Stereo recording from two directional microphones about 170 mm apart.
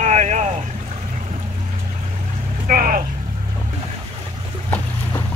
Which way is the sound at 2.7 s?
55° right (ahead or behind).